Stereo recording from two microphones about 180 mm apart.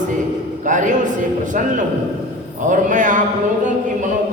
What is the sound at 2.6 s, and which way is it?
Speech, 45° right (ahead or behind).